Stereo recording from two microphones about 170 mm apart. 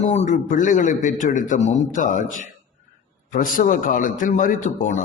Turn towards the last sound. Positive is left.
turn(degrees=50)  # may be behind; listen again after turning